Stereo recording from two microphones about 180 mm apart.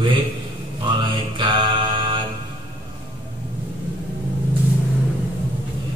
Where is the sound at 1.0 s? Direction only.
25° right (ahead or behind).